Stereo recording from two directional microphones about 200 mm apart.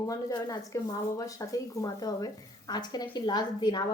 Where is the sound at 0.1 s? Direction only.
15° left (ahead or behind).